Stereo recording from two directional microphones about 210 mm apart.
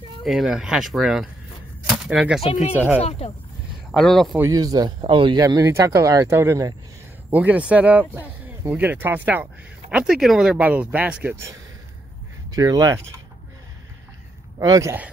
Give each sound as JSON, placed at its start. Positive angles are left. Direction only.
{"t": 0.2, "sound": "speech", "side_deg": 0}
{"t": 1.8, "sound": "a sound", "side_deg": -5}
{"t": 2.4, "sound": "speech", "side_deg": 30}
{"t": 3.9, "sound": "speech", "side_deg": 0}
{"t": 4.4, "sound": "speech", "side_deg": -15}
{"t": 14.6, "sound": "speech", "side_deg": -15}